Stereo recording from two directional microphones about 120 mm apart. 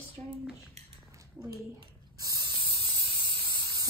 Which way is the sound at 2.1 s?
30° right (ahead or behind).